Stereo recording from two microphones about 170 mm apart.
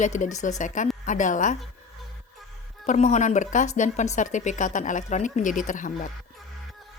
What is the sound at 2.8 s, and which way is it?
Speech, 45° left (ahead or behind).